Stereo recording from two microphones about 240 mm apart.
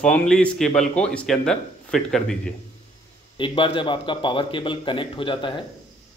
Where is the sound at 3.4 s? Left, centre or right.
Left.